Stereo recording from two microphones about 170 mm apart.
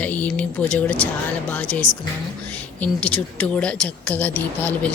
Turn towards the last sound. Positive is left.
turn(degrees=10)  # may be behind; listen again after turning